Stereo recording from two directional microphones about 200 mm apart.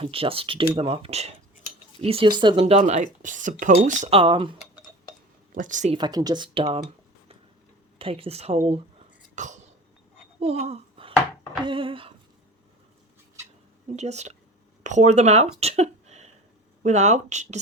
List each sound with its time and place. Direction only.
0.0 s speech: 30° right (ahead or behind)
5.5 s speech: 40° right (ahead or behind)
6.0 s speech: 20° right (ahead or behind)
7.9 s speech: 25° right (ahead or behind)
9.3 s cough: 35° right (ahead or behind)
10.4 s speech: 30° right (ahead or behind)
13.9 s speech: 35° right (ahead or behind)